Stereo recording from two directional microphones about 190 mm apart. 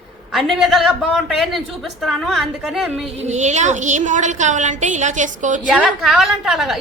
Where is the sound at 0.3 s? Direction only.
Centre (ahead or behind).